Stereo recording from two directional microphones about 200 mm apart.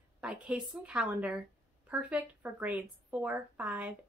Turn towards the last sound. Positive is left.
turn(degrees=-5)  # may be behind; listen again after turning